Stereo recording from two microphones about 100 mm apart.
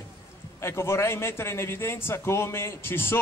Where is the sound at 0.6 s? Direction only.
25° left (ahead or behind).